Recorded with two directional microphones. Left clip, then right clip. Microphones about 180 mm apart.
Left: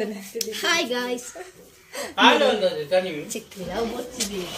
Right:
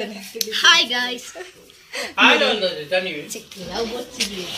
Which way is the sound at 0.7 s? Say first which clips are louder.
Right 5 dB; 10° left (ahead or behind).